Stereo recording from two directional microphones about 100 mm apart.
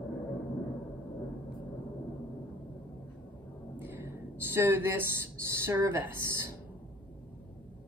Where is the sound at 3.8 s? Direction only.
20° right (ahead or behind).